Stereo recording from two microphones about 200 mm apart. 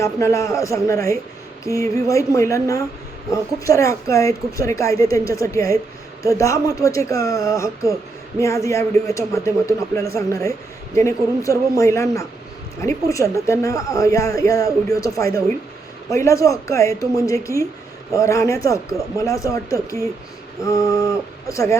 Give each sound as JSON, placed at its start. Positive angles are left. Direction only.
{"t": 0.0, "sound": "speech", "side_deg": 15}
{"t": 20.7, "sound": "speech", "side_deg": 15}